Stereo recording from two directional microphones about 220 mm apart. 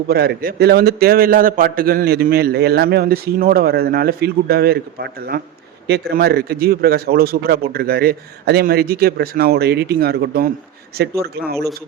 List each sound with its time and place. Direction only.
0.1 s a man's voice: 45° right (ahead or behind)